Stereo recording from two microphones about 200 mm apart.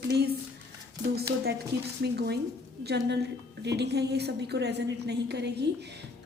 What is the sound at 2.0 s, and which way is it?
Speech, 55° right (ahead or behind).